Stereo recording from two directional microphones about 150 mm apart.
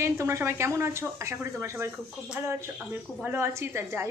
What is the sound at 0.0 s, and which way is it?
Speech, 20° right (ahead or behind).